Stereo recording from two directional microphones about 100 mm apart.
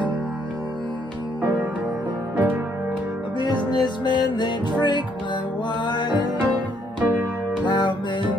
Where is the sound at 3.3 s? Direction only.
45° left (ahead or behind).